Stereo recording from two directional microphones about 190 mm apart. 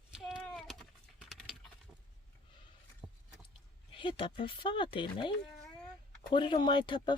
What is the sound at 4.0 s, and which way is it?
Speech, 25° left (ahead or behind).